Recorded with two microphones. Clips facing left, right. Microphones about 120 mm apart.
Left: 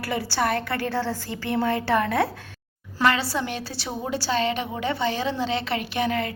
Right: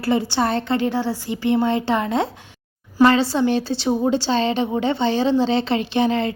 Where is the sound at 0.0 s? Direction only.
25° right (ahead or behind).